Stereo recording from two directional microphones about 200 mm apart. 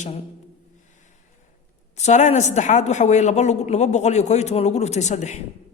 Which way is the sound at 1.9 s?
35° left (ahead or behind).